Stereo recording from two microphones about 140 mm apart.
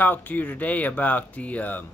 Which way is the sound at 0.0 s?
15° left (ahead or behind).